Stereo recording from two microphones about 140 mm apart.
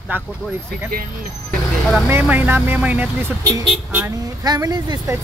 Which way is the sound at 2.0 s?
15° right (ahead or behind).